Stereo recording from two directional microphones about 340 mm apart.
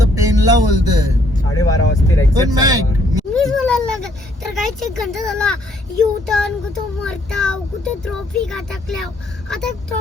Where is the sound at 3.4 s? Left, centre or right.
Centre.